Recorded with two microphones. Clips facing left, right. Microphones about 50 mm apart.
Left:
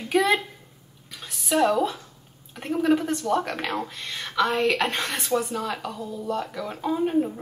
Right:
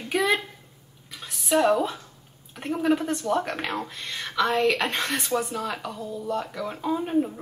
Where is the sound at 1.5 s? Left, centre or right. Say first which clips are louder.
Even; centre.